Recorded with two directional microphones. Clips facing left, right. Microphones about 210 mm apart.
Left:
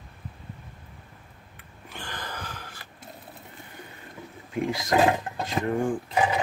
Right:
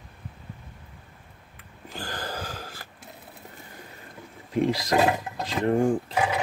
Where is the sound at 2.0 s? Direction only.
35° right (ahead or behind).